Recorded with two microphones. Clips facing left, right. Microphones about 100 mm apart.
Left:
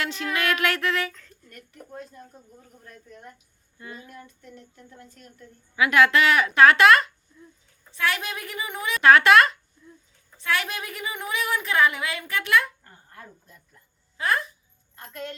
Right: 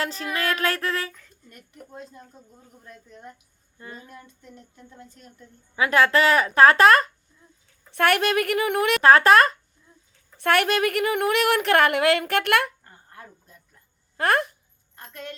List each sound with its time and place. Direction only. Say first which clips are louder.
0.0 s speech: even; 35° right (ahead or behind)
1.1 s speech: left 2 dB; 20° right (ahead or behind)
3.8 s speech: even; 35° right (ahead or behind)
5.7 s speech: even; 35° right (ahead or behind)
7.9 s a woman's voice: right 8 dB; 60° right (ahead or behind)
9.0 s speech: even; 35° right (ahead or behind)
10.3 s a woman's voice: right 7 dB; 60° right (ahead or behind)
14.2 s speech: right 4 dB; 60° right (ahead or behind)